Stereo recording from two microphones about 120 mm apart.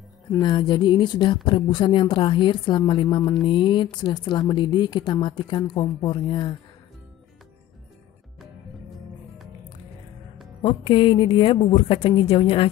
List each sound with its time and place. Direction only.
0.4 s a woman's voice: 40° left (ahead or behind)
10.6 s a woman's voice: 50° left (ahead or behind)